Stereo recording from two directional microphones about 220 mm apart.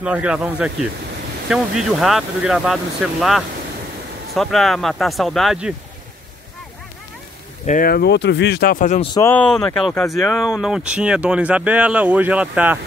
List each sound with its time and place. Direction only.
0.0 s speech: 5° right (ahead or behind)
7.6 s speech: 40° left (ahead or behind)
9.0 s speech: 20° left (ahead or behind)
9.3 s speech: 5° left (ahead or behind)